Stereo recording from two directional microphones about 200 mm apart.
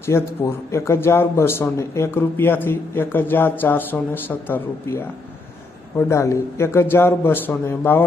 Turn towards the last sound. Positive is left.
turn(degrees=10)  # may be behind; listen again after turning